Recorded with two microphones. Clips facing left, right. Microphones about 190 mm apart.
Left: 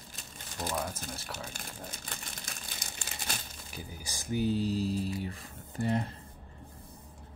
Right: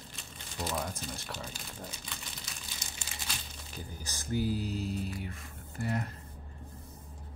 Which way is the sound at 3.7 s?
10° left (ahead or behind).